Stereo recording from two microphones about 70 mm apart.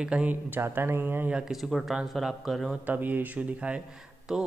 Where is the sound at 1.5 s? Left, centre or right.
Centre.